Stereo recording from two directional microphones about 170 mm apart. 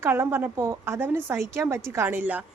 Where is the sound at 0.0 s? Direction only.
15° right (ahead or behind).